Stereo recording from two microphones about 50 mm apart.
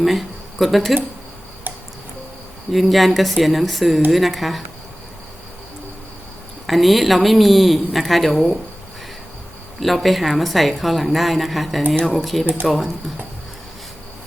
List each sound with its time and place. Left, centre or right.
0.0 s speech: centre
2.7 s a woman's voice: centre
6.7 s a woman's voice: centre
9.8 s a woman's voice: centre